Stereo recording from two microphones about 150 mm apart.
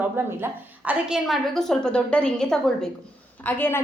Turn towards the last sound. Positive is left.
turn(degrees=15)  # may be behind; listen again after turning